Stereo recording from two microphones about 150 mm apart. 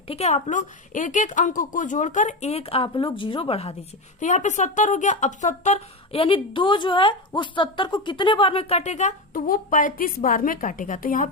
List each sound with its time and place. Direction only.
0.1 s speech: 45° left (ahead or behind)
4.2 s a woman's voice: 55° left (ahead or behind)